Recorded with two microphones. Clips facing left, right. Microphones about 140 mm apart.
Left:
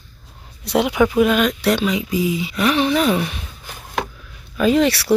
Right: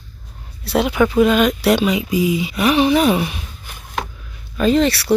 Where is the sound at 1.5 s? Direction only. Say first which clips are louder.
Right 3 dB; 10° right (ahead or behind).